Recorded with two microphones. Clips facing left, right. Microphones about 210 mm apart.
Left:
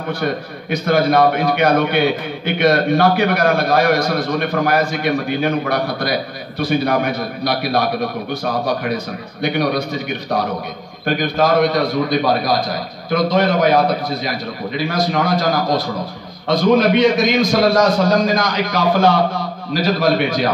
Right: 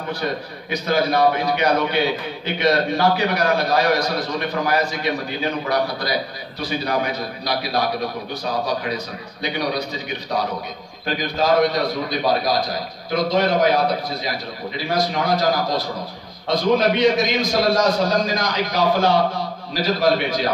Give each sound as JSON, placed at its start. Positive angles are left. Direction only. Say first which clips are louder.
{"t": 0.2, "sound": "a man's voice", "louder": "left 4 dB", "side_deg": 55}
{"t": 14.8, "sound": "a man's voice", "louder": "left 3 dB", "side_deg": 55}